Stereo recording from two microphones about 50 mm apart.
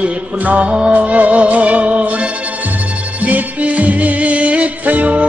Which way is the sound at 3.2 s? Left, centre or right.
Right.